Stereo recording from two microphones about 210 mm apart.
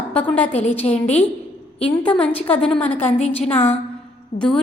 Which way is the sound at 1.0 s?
30° left (ahead or behind).